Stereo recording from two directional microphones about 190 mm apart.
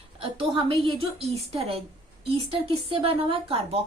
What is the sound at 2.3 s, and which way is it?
A woman's voice, 30° right (ahead or behind).